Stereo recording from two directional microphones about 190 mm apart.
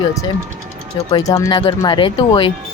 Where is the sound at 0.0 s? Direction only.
20° left (ahead or behind).